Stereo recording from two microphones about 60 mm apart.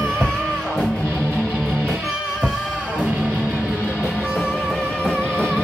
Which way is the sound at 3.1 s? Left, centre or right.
Right.